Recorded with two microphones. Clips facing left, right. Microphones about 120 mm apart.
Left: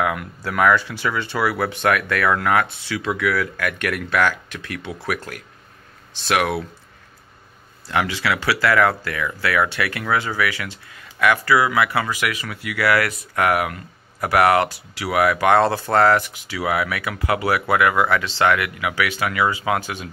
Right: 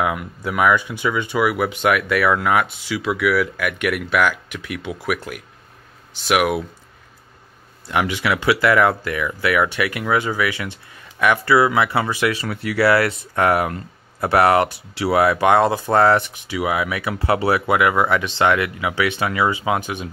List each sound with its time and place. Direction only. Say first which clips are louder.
0.0 s speech: right 1 dB; 15° right (ahead or behind)
7.9 s speech: right 1 dB; 20° right (ahead or behind)